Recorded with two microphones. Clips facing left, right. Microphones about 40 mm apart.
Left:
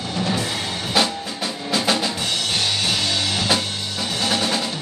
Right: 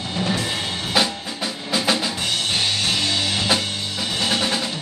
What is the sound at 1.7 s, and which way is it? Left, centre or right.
Drum, centre.